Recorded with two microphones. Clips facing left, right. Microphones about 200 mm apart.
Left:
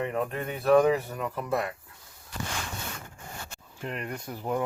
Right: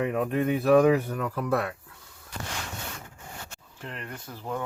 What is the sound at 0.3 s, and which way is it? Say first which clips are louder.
Speech: right 8 dB; 5° right (ahead or behind).